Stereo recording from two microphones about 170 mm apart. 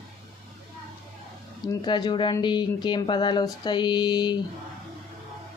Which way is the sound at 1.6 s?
25° left (ahead or behind).